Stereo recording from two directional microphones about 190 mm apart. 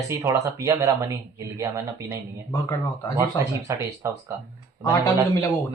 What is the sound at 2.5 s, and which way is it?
Speech, 15° left (ahead or behind).